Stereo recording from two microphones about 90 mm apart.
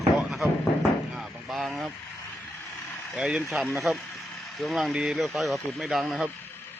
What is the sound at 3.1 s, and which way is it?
Speech, 10° right (ahead or behind).